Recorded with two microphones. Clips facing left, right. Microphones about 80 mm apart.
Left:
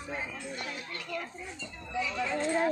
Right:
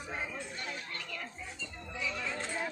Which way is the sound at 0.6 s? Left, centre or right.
Centre.